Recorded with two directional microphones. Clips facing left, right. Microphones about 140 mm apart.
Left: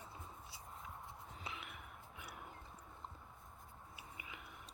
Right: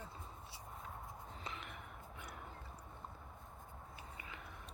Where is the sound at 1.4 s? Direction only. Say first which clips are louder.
Right 1 dB; 5° left (ahead or behind).